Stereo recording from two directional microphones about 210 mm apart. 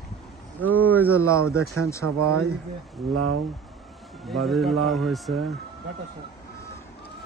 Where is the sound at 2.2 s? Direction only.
90° right.